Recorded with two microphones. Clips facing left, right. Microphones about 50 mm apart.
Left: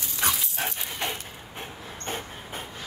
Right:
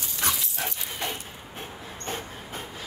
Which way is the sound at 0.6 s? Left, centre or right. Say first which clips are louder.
Left 1 dB; left.